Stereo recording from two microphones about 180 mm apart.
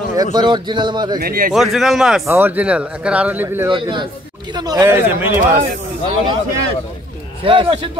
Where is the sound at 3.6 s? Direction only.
25° right (ahead or behind).